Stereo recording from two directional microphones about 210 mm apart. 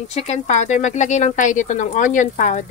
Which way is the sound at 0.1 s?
35° left (ahead or behind).